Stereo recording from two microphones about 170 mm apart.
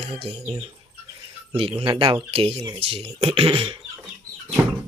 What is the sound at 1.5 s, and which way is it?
Speech, 35° right (ahead or behind).